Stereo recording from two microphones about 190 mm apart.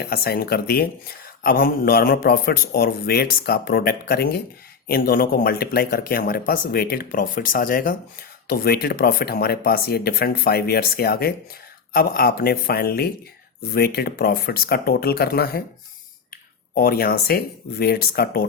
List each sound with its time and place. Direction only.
0.0 s speech: 50° left (ahead or behind)